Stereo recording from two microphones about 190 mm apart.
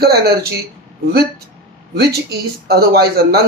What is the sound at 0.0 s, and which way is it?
Speech, 55° right (ahead or behind).